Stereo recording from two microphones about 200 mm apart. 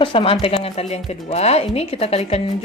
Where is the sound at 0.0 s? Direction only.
25° left (ahead or behind).